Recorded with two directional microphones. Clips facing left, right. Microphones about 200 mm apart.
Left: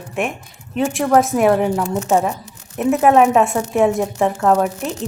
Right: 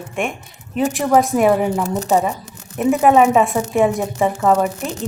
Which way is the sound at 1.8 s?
35° right (ahead or behind).